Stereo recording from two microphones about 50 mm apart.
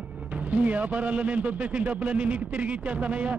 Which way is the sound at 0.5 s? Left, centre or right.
Right.